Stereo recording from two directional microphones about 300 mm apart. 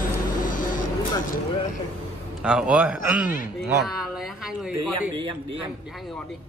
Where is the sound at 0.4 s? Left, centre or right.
Left.